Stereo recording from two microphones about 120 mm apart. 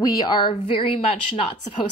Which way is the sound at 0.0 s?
35° left (ahead or behind).